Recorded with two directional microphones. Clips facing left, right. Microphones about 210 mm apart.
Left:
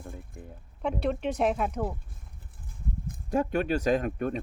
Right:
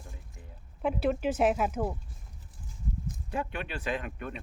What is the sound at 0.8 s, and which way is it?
Speech, 5° right (ahead or behind).